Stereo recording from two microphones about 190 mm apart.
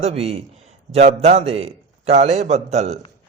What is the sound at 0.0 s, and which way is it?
A man's voice, 30° right (ahead or behind).